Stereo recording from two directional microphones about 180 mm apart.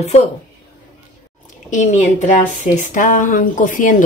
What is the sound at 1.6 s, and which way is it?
A woman's voice, 45° left (ahead or behind).